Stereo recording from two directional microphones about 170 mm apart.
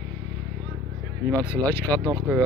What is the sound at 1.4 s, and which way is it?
Speech, 15° left (ahead or behind).